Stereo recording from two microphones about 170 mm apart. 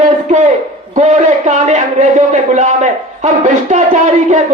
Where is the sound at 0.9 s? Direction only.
45° right (ahead or behind).